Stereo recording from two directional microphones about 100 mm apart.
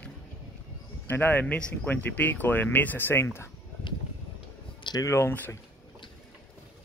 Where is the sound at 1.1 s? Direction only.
20° left (ahead or behind).